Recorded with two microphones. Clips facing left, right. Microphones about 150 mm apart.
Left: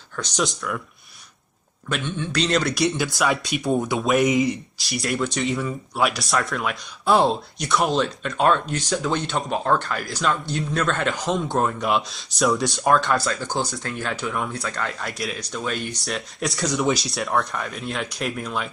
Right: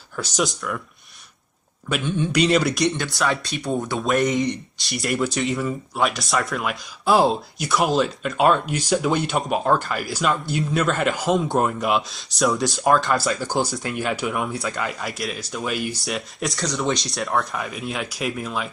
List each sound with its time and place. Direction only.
0.1 s speech: 5° right (ahead or behind)
1.9 s speech: 10° right (ahead or behind)